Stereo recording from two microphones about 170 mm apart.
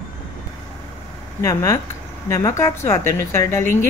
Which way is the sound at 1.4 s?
20° left (ahead or behind).